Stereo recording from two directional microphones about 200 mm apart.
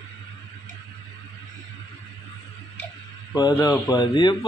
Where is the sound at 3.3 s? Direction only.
20° left (ahead or behind).